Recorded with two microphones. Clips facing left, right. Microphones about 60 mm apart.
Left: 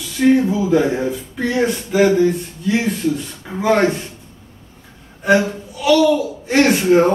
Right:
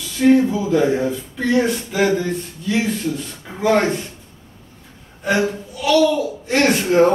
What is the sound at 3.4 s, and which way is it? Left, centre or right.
Speech, centre.